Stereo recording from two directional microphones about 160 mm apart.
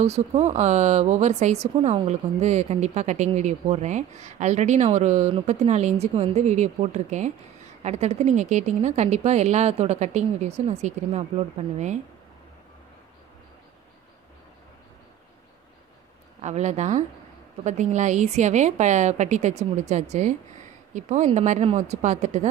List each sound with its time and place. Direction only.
0.0 s speech: 40° right (ahead or behind)
16.4 s speech: 45° right (ahead or behind)